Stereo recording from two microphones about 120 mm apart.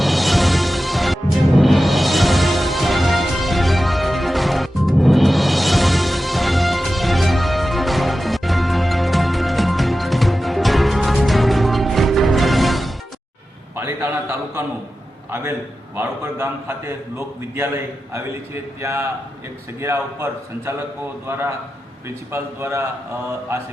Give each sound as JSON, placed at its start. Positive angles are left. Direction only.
{"t": 0.0, "sound": "music", "side_deg": 0}
{"t": 13.7, "sound": "a sound", "side_deg": -20}
{"t": 16.0, "sound": "a man's voice", "side_deg": -20}